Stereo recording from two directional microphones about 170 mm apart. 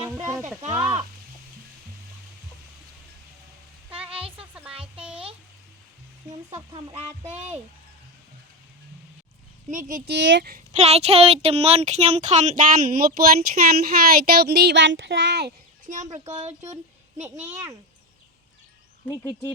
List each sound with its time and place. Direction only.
0.0 s a sound: 25° right (ahead or behind)
4.4 s music: 5° right (ahead or behind)
4.7 s a sound: 35° right (ahead or behind)
6.5 s speech: 30° right (ahead or behind)
9.6 s speech: 50° right (ahead or behind)
10.1 s speech: 90° right
10.8 s speech: 35° right (ahead or behind); by 15.5 s 85° right
16.1 s speech: 40° right (ahead or behind)
17.5 s speech: 15° right (ahead or behind)
19.0 s speech: 20° left (ahead or behind)